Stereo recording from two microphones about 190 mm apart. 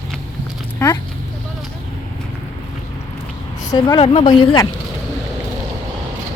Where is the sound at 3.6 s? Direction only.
20° left (ahead or behind).